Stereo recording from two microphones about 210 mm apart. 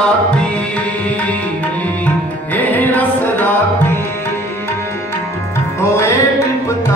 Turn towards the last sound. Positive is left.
turn(degrees=15)  # may be behind; listen again after turning